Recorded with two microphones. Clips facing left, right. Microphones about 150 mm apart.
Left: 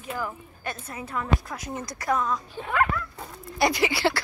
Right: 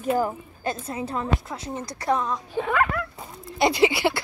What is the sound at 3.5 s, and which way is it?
Speech, 25° right (ahead or behind).